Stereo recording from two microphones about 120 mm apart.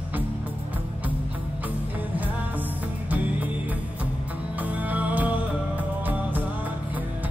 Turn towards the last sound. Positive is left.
turn(degrees=-15)  # may be behind; listen again after turning